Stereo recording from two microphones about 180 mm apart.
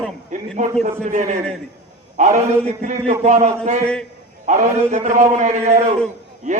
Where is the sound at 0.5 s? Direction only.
40° right (ahead or behind).